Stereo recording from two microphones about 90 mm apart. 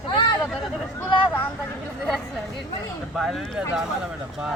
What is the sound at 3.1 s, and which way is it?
Speech, centre (ahead or behind).